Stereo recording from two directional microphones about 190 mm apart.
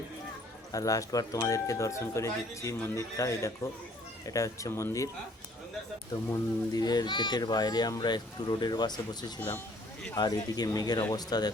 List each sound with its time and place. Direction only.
0.7 s speech: 20° left (ahead or behind)
6.3 s speech: 20° left (ahead or behind)